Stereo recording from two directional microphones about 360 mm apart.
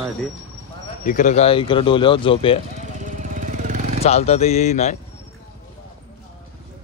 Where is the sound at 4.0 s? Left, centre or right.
Centre.